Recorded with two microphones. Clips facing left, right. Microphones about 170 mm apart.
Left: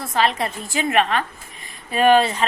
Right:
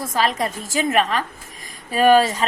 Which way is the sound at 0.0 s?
40° right (ahead or behind).